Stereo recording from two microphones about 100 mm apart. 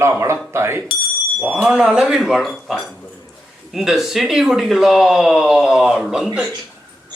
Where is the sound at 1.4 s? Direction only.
10° right (ahead or behind).